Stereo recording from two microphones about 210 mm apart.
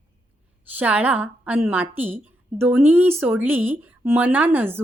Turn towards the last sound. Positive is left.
turn(degrees=-10)  # may be behind; listen again after turning